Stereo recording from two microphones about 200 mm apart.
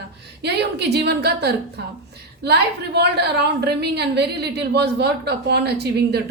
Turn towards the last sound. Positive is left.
turn(degrees=-55)  # may be behind; listen again after turning